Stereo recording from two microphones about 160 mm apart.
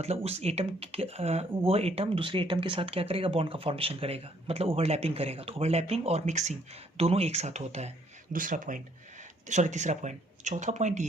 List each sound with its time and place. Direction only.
0.0 s speech: 40° right (ahead or behind)